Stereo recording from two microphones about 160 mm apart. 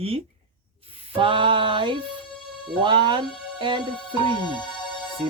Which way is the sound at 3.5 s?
30° right (ahead or behind).